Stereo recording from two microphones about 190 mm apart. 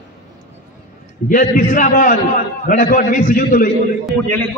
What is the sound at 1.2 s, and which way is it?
A man's voice, 45° left (ahead or behind).